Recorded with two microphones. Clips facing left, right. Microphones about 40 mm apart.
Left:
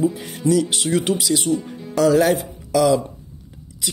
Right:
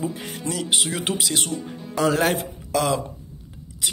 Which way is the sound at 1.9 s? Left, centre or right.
Right.